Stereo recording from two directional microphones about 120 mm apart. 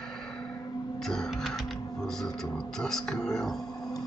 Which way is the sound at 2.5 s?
5° left (ahead or behind).